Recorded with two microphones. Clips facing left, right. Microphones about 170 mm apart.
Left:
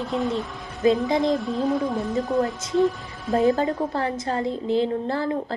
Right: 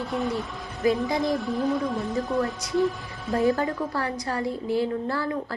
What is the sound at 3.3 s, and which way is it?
A woman's voice, 20° left (ahead or behind).